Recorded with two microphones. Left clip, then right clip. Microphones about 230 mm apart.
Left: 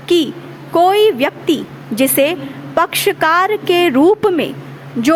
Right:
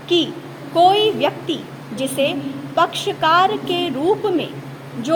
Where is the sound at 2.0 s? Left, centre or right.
Left.